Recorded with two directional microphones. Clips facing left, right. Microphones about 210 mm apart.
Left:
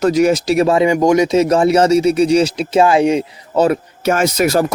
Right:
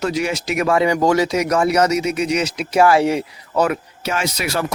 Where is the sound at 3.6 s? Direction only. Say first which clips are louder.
Left 7 dB; 45° left (ahead or behind).